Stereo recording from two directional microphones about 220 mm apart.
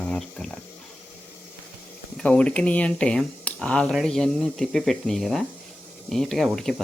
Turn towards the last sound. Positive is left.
turn(degrees=0)  # may be behind; listen again after turning